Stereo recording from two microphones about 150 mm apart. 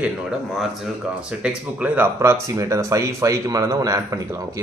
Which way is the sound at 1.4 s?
10° right (ahead or behind).